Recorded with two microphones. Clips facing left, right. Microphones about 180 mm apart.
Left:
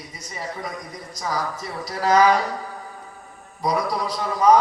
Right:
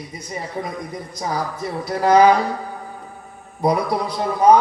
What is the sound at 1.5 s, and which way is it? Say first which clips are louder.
Speech: right 6 dB; 55° right (ahead or behind).